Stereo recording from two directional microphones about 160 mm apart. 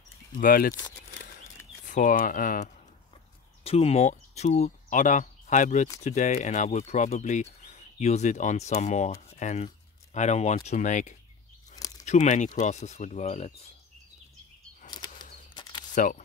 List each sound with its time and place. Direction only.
0.3 s speech: 60° left (ahead or behind)
1.9 s speech: 55° left (ahead or behind)
3.6 s speech: 40° left (ahead or behind)
14.9 s a sound: 25° left (ahead or behind)
15.9 s speech: 55° left (ahead or behind)